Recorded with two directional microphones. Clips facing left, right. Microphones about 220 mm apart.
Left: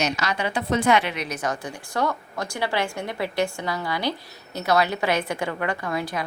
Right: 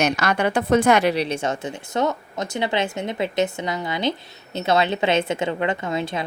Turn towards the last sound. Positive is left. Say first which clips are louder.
# right 3 dB
turn(degrees=-25)  # may be behind; listen again after turning